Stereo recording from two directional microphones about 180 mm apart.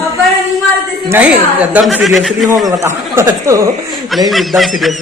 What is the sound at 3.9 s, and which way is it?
A woman's voice, centre (ahead or behind).